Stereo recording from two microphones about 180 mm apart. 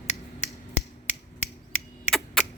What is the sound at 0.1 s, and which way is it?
Finger snapping, 40° left (ahead or behind).